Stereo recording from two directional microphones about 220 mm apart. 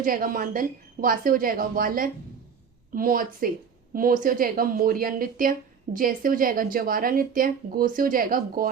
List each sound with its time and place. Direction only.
0.0 s a woman's voice: 40° right (ahead or behind)